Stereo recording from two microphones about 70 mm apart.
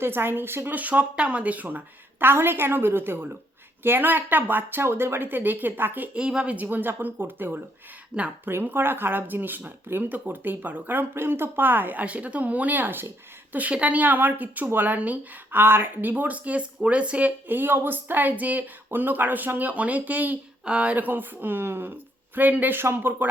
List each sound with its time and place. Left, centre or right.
0.0 s a woman's voice: right
6.1 s a woman's voice: centre; by 7.6 s right
8.1 s speech: centre
8.4 s a woman's voice: right